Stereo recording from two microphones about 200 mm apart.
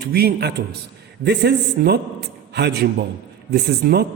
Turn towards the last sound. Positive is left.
turn(degrees=-50)  # may be behind; listen again after turning